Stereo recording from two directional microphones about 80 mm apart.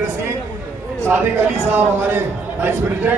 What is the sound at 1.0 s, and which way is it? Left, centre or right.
A man's voice, right.